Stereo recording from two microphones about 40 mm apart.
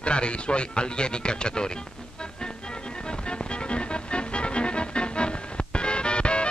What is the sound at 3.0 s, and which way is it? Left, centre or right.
Music, left.